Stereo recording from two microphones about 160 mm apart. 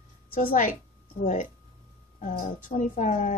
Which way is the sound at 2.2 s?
50° left (ahead or behind).